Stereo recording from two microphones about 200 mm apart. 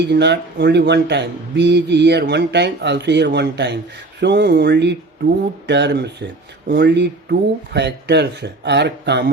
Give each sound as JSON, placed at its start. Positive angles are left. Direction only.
{"t": 0.1, "sound": "speech", "side_deg": -55}